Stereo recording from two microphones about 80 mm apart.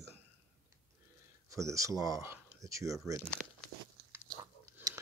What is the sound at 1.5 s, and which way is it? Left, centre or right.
Speech, right.